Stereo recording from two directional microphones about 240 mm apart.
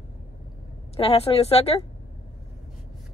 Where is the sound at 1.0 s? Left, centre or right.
Left.